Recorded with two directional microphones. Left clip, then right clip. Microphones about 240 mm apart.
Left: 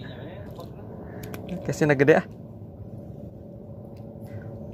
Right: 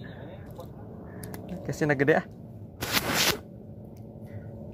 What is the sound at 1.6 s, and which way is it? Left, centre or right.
Speech, centre.